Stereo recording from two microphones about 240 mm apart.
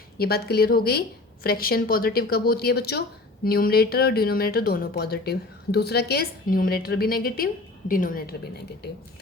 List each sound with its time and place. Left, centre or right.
0.2 s speech: left